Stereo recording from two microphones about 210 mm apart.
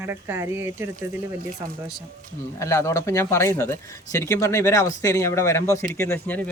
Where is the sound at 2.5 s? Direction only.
15° left (ahead or behind).